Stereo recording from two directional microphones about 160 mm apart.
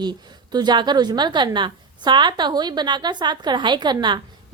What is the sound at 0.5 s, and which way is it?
A woman's voice, 25° right (ahead or behind).